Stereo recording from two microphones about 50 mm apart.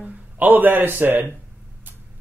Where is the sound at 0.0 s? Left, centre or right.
Right.